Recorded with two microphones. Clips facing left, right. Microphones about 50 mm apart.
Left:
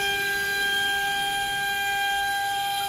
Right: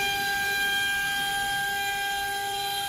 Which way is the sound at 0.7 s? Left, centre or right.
Left.